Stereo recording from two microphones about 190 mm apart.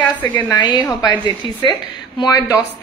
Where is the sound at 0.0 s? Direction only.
10° left (ahead or behind).